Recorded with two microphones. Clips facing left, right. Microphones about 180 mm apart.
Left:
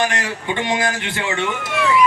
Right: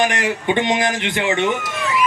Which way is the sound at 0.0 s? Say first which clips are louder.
Right 3 dB; 20° right (ahead or behind).